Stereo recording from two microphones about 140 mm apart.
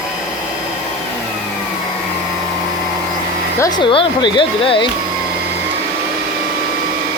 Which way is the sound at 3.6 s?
30° left (ahead or behind).